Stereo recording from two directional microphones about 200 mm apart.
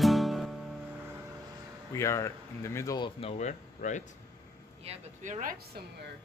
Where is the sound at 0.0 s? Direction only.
Centre (ahead or behind).